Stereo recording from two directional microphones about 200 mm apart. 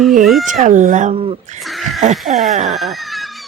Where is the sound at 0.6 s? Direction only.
40° right (ahead or behind).